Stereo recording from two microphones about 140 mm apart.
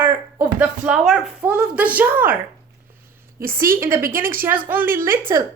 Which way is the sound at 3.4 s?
90° right.